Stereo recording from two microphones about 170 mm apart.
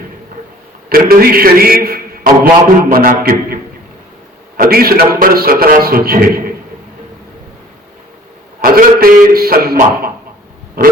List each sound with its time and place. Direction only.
0.9 s a man's voice: 60° right (ahead or behind)
8.6 s a man's voice: 60° right (ahead or behind)